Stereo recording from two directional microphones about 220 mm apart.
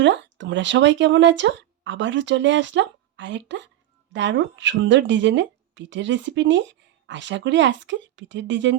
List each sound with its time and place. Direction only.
0.0 s speech: 55° right (ahead or behind)